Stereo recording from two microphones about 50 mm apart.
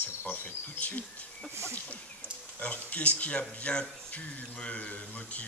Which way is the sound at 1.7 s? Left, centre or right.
Left.